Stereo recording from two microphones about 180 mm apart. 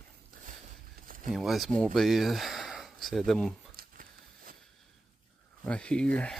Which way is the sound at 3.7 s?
55° right (ahead or behind).